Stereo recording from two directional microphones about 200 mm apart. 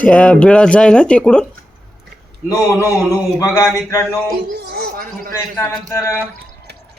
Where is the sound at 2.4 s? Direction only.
15° left (ahead or behind).